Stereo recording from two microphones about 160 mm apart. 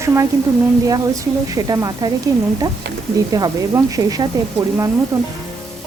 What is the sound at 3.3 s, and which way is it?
Speech, 20° right (ahead or behind).